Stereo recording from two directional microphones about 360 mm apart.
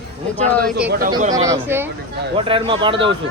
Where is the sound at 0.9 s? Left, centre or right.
Right.